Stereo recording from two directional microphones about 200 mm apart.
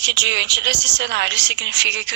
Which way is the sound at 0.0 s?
60° right (ahead or behind).